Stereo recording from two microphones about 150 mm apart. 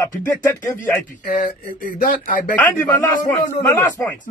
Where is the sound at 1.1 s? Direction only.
65° left (ahead or behind).